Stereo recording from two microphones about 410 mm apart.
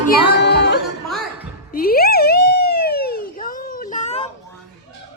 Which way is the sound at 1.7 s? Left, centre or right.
Left.